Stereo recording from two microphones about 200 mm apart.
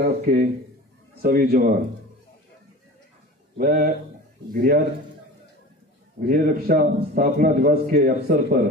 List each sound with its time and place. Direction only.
0.0 s a man's voice: 45° right (ahead or behind)
3.5 s a man's voice: 45° right (ahead or behind)
6.1 s a man's voice: 45° right (ahead or behind)